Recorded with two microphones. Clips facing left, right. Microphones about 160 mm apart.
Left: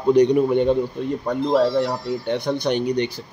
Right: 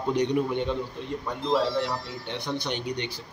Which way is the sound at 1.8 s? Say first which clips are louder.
Left 8 dB; 45° left (ahead or behind).